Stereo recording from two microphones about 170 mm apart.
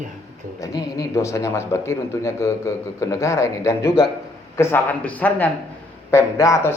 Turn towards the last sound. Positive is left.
turn(degrees=15)  # may be behind; listen again after turning